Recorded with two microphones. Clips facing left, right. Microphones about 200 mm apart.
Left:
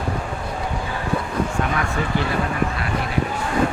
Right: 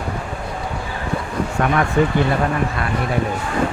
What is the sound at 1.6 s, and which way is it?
Speech, 65° right (ahead or behind).